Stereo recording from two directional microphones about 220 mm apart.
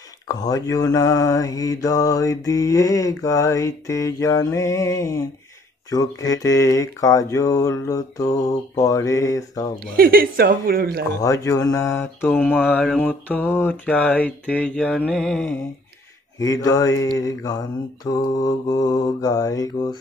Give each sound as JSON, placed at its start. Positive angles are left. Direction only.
{"t": 0.3, "sound": "mantra", "side_deg": 15}
{"t": 9.9, "sound": "speech", "side_deg": -45}
{"t": 11.1, "sound": "mantra", "side_deg": 15}
{"t": 16.3, "sound": "mantra", "side_deg": 15}